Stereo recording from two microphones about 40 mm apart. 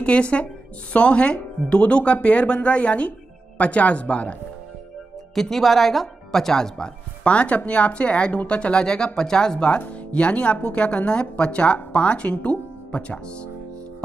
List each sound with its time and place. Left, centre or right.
0.0 s a woman's voice: left
5.3 s speech: centre
7.2 s speech: left; by 9.7 s centre
10.1 s speech: left